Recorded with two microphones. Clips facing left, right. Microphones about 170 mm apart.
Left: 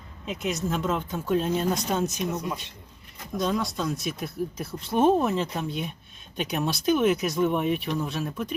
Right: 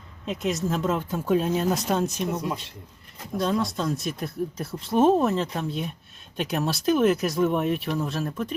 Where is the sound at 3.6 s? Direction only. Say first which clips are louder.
Right 2 dB; centre (ahead or behind).